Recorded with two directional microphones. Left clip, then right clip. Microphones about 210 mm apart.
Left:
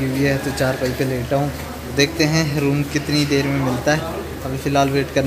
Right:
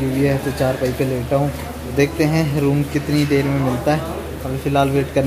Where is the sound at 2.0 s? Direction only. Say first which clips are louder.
Even; 10° right (ahead or behind).